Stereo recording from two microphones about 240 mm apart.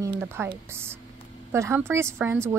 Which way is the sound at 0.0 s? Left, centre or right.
Centre.